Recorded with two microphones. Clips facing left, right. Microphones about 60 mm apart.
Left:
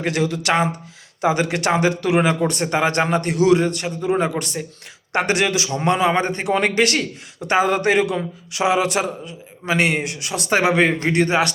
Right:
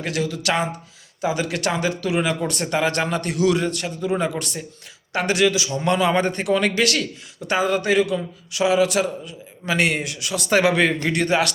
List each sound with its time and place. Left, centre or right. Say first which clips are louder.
0.0 s a man's voice: left 3 dB; left
1.2 s a man's voice: left 4 dB; left
2.4 s a man's voice: left 3 dB; left
5.1 s a man's voice: even; left
5.7 s a man's voice: left 1 dB; left
10.5 s speech: left 1 dB; left